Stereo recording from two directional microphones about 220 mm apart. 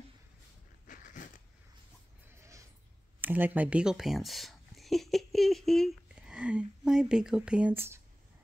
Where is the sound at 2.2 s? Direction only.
10° right (ahead or behind).